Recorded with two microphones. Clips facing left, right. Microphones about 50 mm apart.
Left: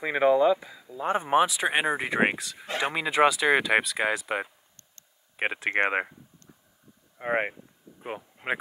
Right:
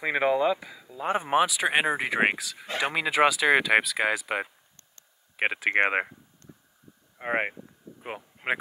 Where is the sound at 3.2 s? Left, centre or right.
Centre.